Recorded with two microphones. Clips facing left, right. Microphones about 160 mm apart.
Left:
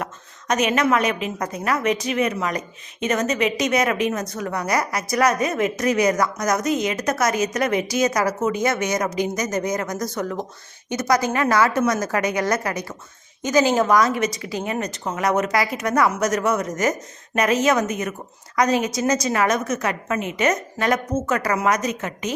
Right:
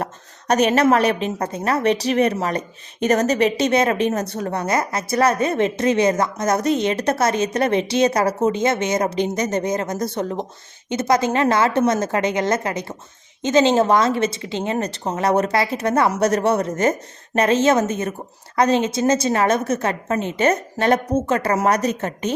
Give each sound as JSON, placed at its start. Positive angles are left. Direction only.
{"t": 0.0, "sound": "a woman's voice", "side_deg": -35}